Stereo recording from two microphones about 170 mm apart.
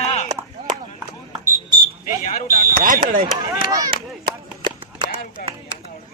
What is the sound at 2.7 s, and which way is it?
Speech, 55° right (ahead or behind).